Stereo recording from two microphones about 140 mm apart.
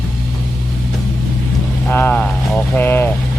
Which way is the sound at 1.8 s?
15° left (ahead or behind).